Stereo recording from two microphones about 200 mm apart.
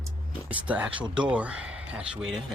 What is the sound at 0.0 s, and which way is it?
Speech, 5° right (ahead or behind).